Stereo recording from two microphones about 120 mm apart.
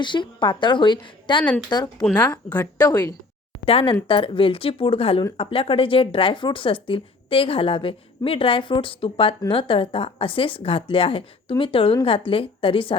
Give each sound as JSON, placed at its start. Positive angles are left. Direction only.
{"t": 0.0, "sound": "a woman's voice", "side_deg": 40}
{"t": 3.7, "sound": "speech", "side_deg": 50}